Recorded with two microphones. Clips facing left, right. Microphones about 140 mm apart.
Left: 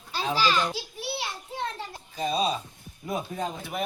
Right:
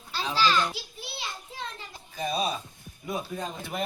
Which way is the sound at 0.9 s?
70° left (ahead or behind).